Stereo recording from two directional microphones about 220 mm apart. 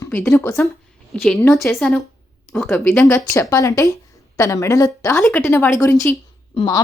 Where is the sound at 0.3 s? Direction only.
10° left (ahead or behind).